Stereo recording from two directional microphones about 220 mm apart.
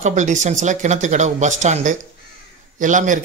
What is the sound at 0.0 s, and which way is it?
Speech, 35° right (ahead or behind).